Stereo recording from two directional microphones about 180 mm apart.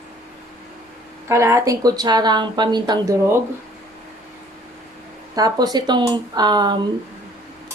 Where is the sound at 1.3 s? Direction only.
15° right (ahead or behind).